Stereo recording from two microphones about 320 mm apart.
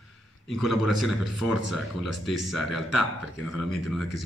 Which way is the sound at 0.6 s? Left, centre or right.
Centre.